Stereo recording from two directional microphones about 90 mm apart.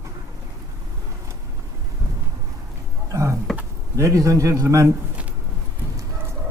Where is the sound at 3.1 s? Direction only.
35° right (ahead or behind).